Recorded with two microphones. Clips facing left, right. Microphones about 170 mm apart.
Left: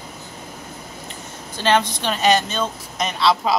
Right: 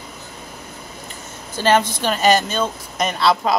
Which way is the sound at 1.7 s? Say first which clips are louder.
Right 2 dB; 5° right (ahead or behind).